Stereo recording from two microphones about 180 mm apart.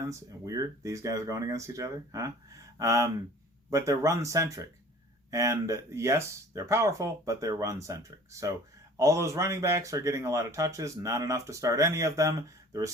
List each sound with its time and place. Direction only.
0.0 s speech: 20° right (ahead or behind)